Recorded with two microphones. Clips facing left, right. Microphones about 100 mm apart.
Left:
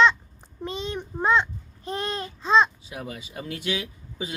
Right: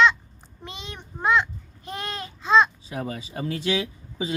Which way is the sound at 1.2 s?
30° left (ahead or behind).